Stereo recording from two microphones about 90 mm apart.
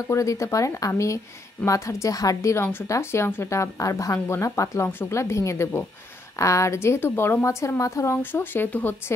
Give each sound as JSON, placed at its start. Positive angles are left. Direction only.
{"t": 0.0, "sound": "a woman's voice", "side_deg": 40}